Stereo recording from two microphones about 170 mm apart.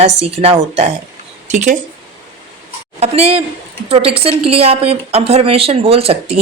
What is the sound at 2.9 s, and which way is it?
A woman's voice, 40° right (ahead or behind).